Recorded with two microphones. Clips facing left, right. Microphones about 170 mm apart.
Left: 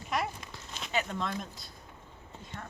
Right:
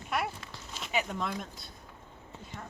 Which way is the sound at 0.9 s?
5° right (ahead or behind).